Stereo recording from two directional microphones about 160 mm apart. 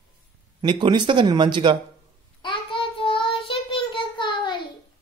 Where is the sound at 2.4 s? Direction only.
30° left (ahead or behind).